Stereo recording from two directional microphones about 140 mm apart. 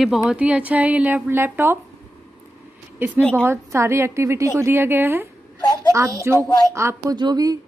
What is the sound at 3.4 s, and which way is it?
A woman's voice, 20° right (ahead or behind).